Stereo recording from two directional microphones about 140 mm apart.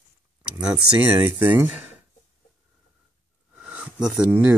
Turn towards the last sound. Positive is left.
turn(degrees=-5)  # may be behind; listen again after turning